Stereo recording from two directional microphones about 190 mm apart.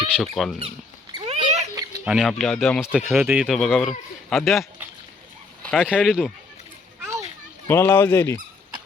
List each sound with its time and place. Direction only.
0.2 s speech: centre (ahead or behind)
1.1 s a sound: 30° right (ahead or behind)
2.0 s speech: centre (ahead or behind)
7.0 s children playing: 15° right (ahead or behind)
7.7 s speech: 10° left (ahead or behind)